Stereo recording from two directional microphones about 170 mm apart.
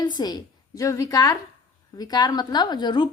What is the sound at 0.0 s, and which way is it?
A woman's voice, 25° left (ahead or behind).